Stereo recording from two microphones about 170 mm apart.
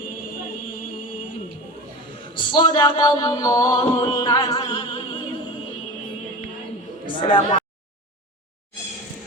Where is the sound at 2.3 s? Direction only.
25° left (ahead or behind).